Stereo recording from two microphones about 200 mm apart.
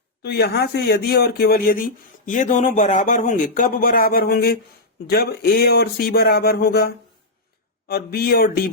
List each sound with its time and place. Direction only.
0.2 s speech: 55° left (ahead or behind)